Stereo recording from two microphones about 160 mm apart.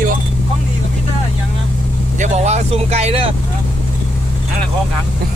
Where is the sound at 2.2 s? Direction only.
45° right (ahead or behind).